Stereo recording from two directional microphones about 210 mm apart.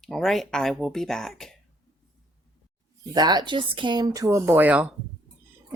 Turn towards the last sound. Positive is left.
turn(degrees=-5)  # may be behind; listen again after turning